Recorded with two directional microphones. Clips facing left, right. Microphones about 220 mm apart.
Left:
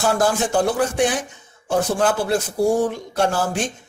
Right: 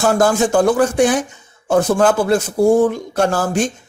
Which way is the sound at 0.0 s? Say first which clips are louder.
Right 5 dB; 45° right (ahead or behind).